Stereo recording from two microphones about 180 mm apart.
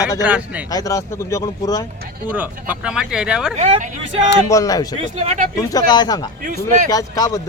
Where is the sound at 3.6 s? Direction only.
40° right (ahead or behind).